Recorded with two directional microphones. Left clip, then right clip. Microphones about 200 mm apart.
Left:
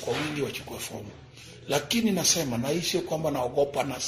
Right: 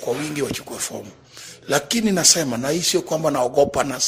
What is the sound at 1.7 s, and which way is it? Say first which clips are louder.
Speech: right 6 dB; 40° right (ahead or behind).